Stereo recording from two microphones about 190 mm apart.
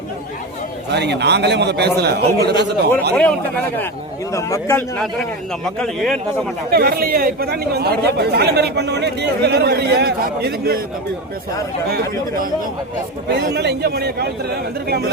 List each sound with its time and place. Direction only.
0.9 s speech: 60° right (ahead or behind)
4.3 s a man's voice: 15° left (ahead or behind)
5.6 s a man's voice: 5° left (ahead or behind)
6.7 s speech: 55° right (ahead or behind)
13.3 s speech: 65° right (ahead or behind)